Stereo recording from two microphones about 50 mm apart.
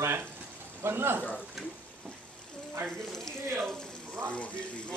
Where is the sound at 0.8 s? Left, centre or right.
Right.